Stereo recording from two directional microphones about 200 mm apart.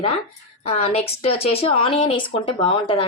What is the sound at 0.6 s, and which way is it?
Speech, 30° left (ahead or behind).